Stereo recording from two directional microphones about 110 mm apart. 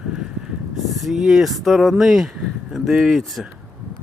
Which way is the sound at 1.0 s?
Centre (ahead or behind).